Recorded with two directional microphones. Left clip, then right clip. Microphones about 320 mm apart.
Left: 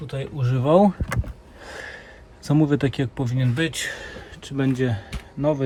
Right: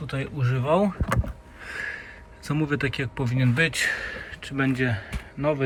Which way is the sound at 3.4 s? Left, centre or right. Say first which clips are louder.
Right 3 dB; centre.